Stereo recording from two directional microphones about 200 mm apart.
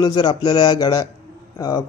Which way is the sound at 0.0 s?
20° left (ahead or behind).